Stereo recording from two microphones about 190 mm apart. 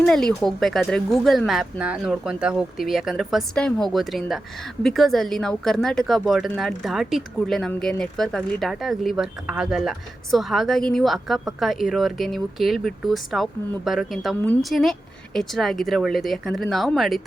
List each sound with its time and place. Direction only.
0.0 s a woman's voice: 5° left (ahead or behind)